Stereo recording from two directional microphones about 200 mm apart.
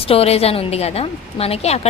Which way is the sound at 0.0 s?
30° left (ahead or behind).